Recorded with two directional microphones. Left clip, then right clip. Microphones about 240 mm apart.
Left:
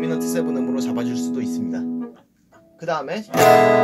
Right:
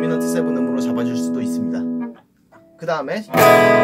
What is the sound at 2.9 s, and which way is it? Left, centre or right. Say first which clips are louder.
Speech: right 2 dB; centre.